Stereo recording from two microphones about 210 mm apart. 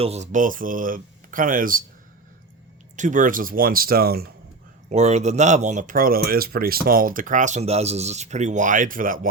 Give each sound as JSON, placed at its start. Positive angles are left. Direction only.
{"t": 0.0, "sound": "speech", "side_deg": -30}
{"t": 2.9, "sound": "speech", "side_deg": -35}
{"t": 4.9, "sound": "speech", "side_deg": -30}